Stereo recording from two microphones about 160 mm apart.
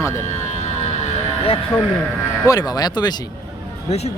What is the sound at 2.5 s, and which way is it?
Speech, 25° left (ahead or behind).